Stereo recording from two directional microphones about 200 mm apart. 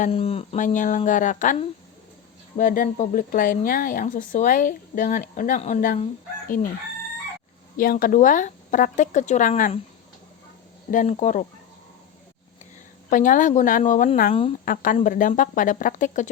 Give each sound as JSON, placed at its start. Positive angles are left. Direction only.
{"t": 0.0, "sound": "speech", "side_deg": 30}
{"t": 7.8, "sound": "speech", "side_deg": 45}
{"t": 10.9, "sound": "speech", "side_deg": 40}
{"t": 13.1, "sound": "speech", "side_deg": 40}